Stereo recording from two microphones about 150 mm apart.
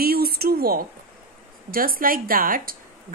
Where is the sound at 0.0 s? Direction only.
90° right.